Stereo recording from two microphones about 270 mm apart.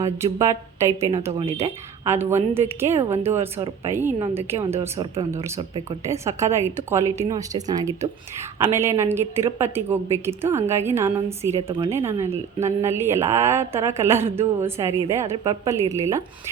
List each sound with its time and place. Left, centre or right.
0.0 s speech: centre
1.5 s a woman's voice: right
2.0 s speech: centre
4.4 s a woman's voice: right
4.8 s speech: centre